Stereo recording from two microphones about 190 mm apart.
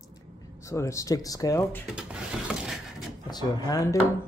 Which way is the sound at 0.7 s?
15° left (ahead or behind).